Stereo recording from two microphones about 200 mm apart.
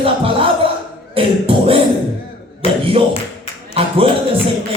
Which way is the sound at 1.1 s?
30° right (ahead or behind).